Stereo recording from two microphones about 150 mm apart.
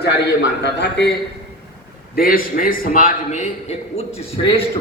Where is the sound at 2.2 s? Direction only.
75° left (ahead or behind).